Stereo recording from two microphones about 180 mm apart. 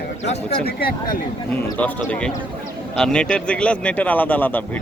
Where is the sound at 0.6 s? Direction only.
55° left (ahead or behind).